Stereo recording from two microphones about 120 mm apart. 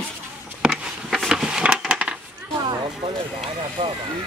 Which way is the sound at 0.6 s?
Centre (ahead or behind).